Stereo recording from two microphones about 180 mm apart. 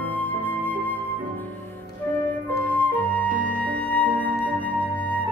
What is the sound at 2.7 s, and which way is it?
Music, 10° left (ahead or behind).